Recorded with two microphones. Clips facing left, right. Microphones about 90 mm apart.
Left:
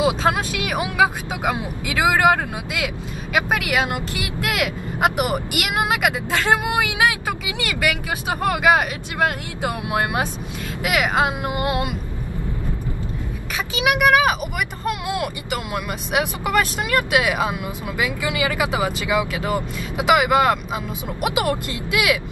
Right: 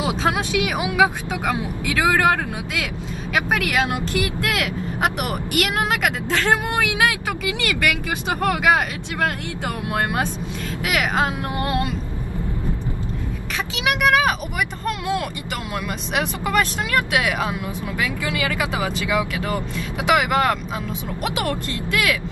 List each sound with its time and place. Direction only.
0.2 s speech: centre (ahead or behind)
1.4 s speech: 15° left (ahead or behind)
13.7 s speech: 5° left (ahead or behind)